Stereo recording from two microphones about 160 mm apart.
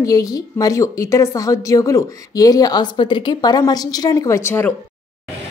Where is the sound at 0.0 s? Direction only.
20° left (ahead or behind).